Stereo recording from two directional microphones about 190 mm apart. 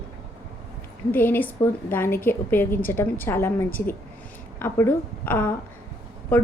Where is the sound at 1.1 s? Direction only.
10° left (ahead or behind).